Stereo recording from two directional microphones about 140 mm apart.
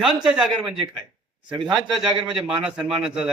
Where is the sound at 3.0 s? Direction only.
5° right (ahead or behind).